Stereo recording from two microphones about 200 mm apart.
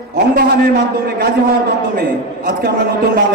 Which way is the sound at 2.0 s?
50° right (ahead or behind).